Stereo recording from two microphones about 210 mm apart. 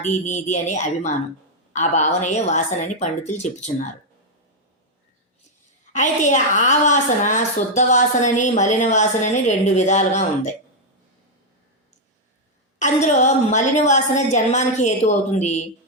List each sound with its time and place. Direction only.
0.0 s a woman's voice: 35° left (ahead or behind)
5.9 s a woman's voice: 35° left (ahead or behind)
12.8 s a woman's voice: 35° left (ahead or behind)